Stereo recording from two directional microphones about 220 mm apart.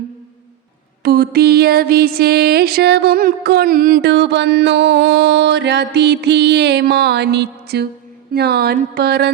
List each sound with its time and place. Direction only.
1.0 s music: 45° right (ahead or behind)